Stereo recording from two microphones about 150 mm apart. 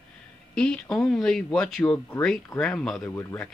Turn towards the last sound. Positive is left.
turn(degrees=10)  # may be behind; listen again after turning